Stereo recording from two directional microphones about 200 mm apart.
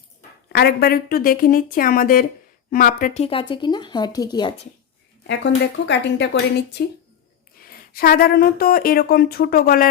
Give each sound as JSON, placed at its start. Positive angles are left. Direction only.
{"t": 0.5, "sound": "speech", "side_deg": 50}
{"t": 3.2, "sound": "speech", "side_deg": 25}
{"t": 5.2, "sound": "speech", "side_deg": 60}